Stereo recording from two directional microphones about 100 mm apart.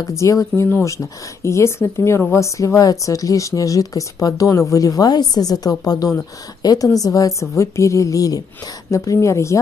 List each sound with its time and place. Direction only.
0.0 s speech: 30° left (ahead or behind)